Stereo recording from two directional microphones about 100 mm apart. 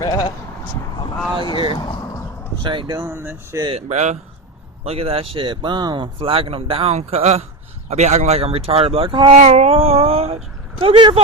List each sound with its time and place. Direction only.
0.0 s speech: 45° left (ahead or behind)
1.5 s speech: 55° left (ahead or behind)
2.6 s speech: 55° right (ahead or behind)
2.9 s speech: 30° right (ahead or behind)
3.7 s speech: 90° right; by 9.3 s 60° right (ahead or behind)
9.5 s speech: 80° right; by 11.1 s 55° right (ahead or behind)